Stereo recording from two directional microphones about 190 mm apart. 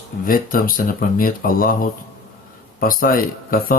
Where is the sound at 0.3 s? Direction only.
50° left (ahead or behind).